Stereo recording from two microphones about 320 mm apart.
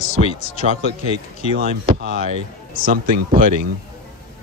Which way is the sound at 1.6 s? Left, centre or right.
Right.